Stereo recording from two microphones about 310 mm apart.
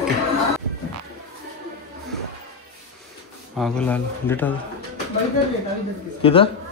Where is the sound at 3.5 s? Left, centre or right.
Centre.